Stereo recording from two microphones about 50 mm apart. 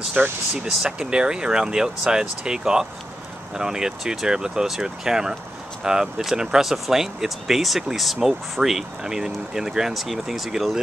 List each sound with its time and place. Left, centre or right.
0.2 s speech: right
0.7 s speech: centre